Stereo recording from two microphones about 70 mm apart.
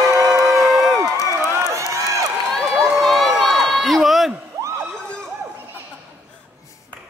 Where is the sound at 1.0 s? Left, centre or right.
Right.